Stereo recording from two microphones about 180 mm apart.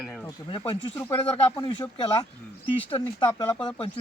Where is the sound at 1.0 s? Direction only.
25° left (ahead or behind).